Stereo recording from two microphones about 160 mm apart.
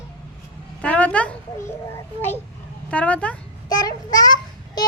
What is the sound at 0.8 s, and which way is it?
Speech, 10° left (ahead or behind).